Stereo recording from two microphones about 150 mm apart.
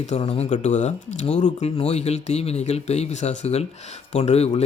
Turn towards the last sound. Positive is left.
turn(degrees=45)  # may be behind; listen again after turning